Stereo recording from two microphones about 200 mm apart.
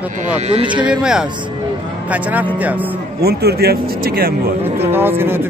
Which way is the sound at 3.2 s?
55° right (ahead or behind).